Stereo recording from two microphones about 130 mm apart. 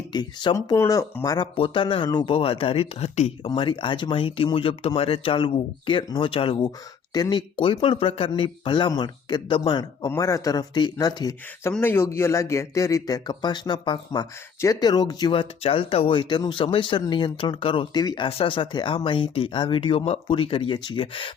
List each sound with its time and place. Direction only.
0.1 s speech: 35° left (ahead or behind)
1.5 s speech: 40° left (ahead or behind)
7.1 s speech: 30° left (ahead or behind)
11.8 s speech: 20° left (ahead or behind)
18.3 s speech: 45° left (ahead or behind)